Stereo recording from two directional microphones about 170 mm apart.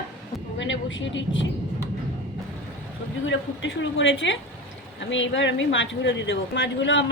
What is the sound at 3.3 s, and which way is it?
Speech, 90° left.